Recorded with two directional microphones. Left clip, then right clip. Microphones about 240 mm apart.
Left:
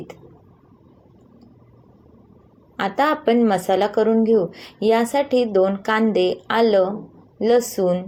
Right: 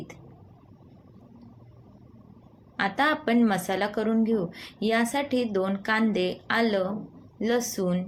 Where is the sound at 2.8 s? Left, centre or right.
Centre.